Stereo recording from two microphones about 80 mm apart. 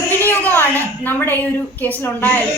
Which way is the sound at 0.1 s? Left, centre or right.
Left.